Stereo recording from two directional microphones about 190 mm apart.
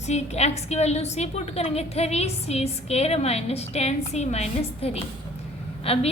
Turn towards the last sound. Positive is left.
turn(degrees=30)  # may be behind; listen again after turning